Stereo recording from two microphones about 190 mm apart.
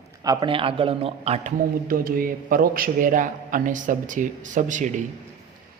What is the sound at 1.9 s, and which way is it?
Speech, 50° right (ahead or behind).